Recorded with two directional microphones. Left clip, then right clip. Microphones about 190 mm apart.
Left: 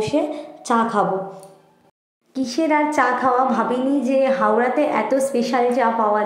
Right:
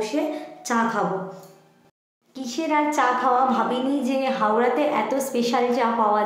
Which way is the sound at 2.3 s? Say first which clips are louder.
Left 4 dB; 30° left (ahead or behind).